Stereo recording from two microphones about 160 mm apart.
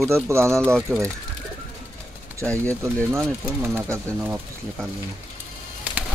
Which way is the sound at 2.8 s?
15° right (ahead or behind).